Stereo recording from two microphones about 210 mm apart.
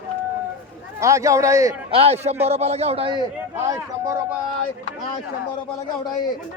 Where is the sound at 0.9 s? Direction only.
15° right (ahead or behind).